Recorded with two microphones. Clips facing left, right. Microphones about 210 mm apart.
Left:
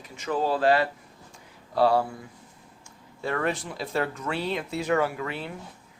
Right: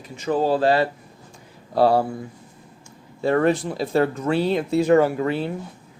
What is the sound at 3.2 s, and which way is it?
Speech, 35° right (ahead or behind).